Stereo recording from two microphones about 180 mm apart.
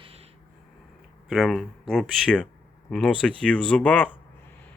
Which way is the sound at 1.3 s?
Centre (ahead or behind).